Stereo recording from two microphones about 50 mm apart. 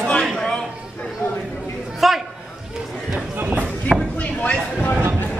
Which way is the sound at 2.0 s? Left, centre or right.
Centre.